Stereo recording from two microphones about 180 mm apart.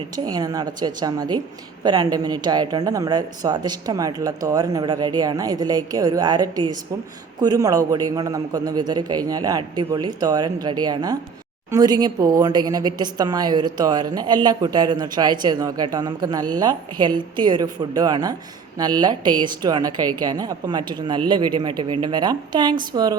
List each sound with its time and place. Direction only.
0.3 s a woman's voice: 20° right (ahead or behind)